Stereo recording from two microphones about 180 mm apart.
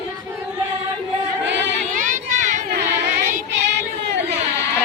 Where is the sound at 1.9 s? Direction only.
45° right (ahead or behind).